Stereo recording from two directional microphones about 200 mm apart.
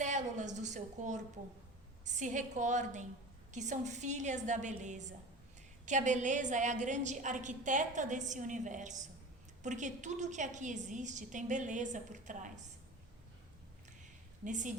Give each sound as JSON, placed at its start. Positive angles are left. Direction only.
{"t": 0.0, "sound": "a sound", "side_deg": -35}
{"t": 2.0, "sound": "a woman's voice", "side_deg": -35}
{"t": 14.4, "sound": "a woman's voice", "side_deg": -40}